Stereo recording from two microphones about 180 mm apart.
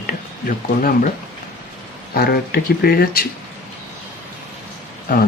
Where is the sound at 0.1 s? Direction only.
50° left (ahead or behind).